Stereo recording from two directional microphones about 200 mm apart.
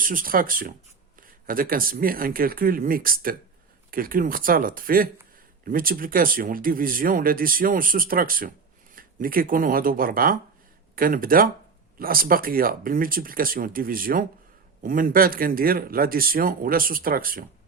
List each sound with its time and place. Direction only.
0.0 s speech: 45° right (ahead or behind)